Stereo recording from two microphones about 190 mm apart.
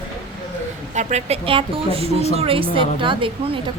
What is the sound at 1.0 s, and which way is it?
A woman's voice, 35° right (ahead or behind).